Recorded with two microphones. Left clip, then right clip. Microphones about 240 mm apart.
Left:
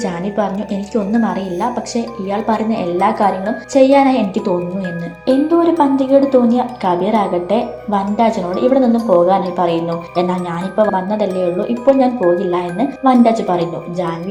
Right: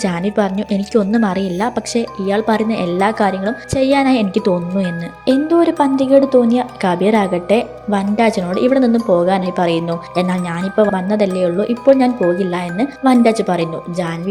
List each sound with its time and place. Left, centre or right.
0.0 s a woman's voice: right